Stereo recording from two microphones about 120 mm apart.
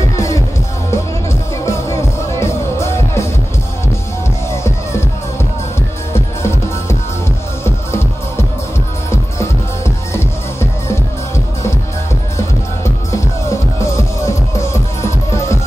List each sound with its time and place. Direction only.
0.1 s music: 25° left (ahead or behind)
1.7 s music: 25° left (ahead or behind)
6.1 s music: 20° left (ahead or behind)
13.5 s music: 25° left (ahead or behind)